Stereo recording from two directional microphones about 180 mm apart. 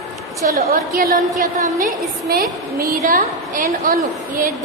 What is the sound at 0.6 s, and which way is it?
A woman's voice, 55° right (ahead or behind).